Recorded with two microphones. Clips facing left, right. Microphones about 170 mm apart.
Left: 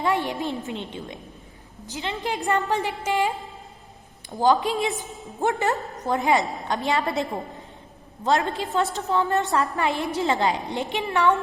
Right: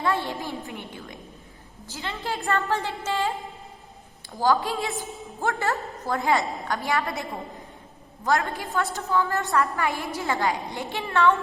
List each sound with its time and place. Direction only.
0.0 s a woman's voice: 15° left (ahead or behind)